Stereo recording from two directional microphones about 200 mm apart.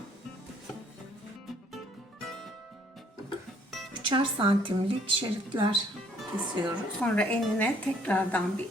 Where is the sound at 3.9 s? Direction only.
25° right (ahead or behind).